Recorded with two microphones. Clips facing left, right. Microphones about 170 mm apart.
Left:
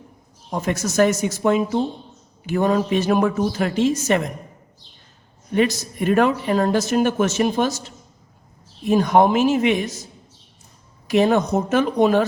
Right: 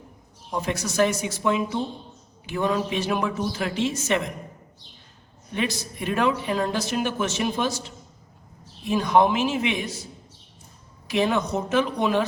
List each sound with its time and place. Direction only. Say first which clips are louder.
0.5 s speech: left 4 dB; 45° left (ahead or behind)
5.5 s speech: left 8 dB; 45° left (ahead or behind)
8.9 s speech: left 4 dB; 45° left (ahead or behind)
11.1 s speech: left 6 dB; 45° left (ahead or behind)